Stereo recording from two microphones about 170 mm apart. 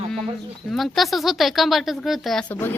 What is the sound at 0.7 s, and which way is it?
A woman's voice, centre (ahead or behind).